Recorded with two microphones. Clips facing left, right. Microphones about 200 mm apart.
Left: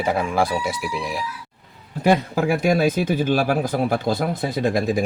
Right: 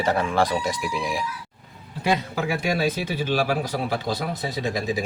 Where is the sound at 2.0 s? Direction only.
50° left (ahead or behind).